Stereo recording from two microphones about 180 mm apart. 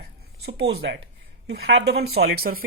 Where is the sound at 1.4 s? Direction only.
85° right; by 2.6 s 55° right (ahead or behind).